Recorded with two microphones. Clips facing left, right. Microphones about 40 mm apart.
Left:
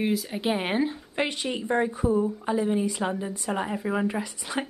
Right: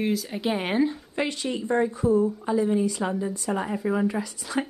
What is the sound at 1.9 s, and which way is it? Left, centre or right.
Speech, centre.